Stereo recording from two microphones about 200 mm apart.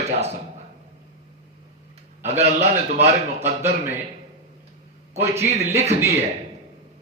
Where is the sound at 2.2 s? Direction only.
35° right (ahead or behind).